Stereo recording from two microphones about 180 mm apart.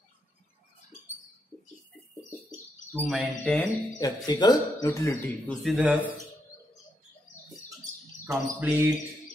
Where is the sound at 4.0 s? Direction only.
20° left (ahead or behind).